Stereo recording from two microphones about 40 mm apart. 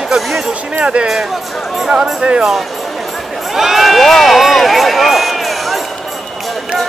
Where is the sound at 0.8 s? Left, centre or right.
Right.